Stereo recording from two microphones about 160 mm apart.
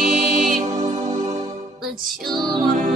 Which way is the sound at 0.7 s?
25° right (ahead or behind).